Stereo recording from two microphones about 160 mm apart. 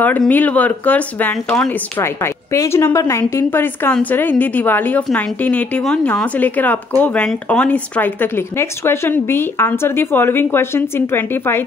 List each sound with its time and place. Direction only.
0.0 s speech: 10° left (ahead or behind)